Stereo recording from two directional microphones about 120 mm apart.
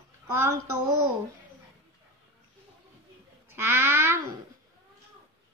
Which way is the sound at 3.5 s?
20° right (ahead or behind).